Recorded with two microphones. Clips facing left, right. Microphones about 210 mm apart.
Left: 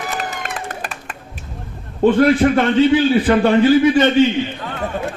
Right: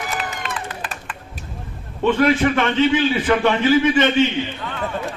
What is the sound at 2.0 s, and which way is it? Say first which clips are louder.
A man's voice: left 4 dB; 35° left (ahead or behind).